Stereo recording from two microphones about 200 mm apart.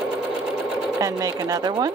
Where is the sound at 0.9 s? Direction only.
15° right (ahead or behind).